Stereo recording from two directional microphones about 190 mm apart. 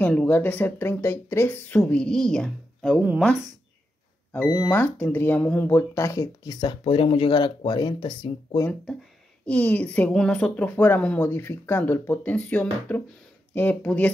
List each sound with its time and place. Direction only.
0.0 s speech: 5° left (ahead or behind)
3.0 s speech: 10° right (ahead or behind)
4.3 s speech: 5° left (ahead or behind); by 8.3 s 25° left (ahead or behind)
9.5 s speech: 5° left (ahead or behind)